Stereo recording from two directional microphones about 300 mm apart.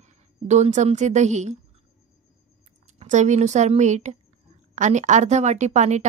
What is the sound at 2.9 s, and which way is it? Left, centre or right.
Speech, right.